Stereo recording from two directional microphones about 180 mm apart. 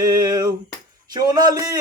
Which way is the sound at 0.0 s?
20° right (ahead or behind).